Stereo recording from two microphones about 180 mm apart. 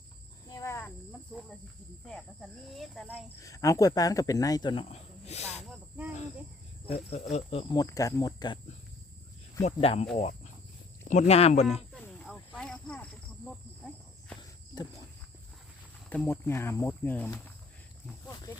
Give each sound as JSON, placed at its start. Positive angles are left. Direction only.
{"t": 0.4, "sound": "cricket", "side_deg": 15}
{"t": 1.3, "sound": "cricket", "side_deg": 0}
{"t": 2.0, "sound": "speech", "side_deg": 5}
{"t": 3.3, "sound": "speech", "side_deg": 20}
{"t": 6.8, "sound": "speech", "side_deg": 35}
{"t": 9.6, "sound": "speech", "side_deg": 35}
{"t": 11.9, "sound": "cricket", "side_deg": 0}
{"t": 16.0, "sound": "speech", "side_deg": 10}